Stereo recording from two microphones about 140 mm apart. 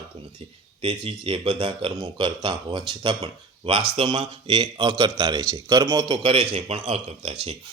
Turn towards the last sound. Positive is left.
turn(degrees=-45)  # may be behind; listen again after turning